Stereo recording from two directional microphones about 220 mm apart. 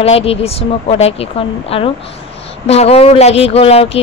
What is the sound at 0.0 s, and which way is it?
Speech, 25° left (ahead or behind).